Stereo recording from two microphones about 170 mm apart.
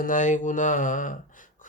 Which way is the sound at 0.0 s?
50° left (ahead or behind).